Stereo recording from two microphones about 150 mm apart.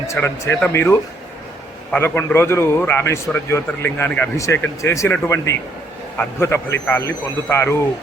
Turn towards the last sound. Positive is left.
turn(degrees=15)  # may be behind; listen again after turning